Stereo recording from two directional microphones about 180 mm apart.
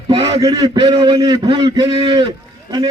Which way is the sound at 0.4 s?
20° right (ahead or behind).